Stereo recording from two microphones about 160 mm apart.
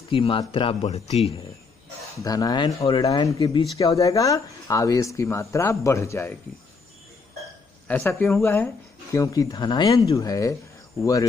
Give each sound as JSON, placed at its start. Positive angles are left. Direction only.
{"t": 0.1, "sound": "speech", "side_deg": 35}
{"t": 2.1, "sound": "speech", "side_deg": 25}
{"t": 7.9, "sound": "speech", "side_deg": 15}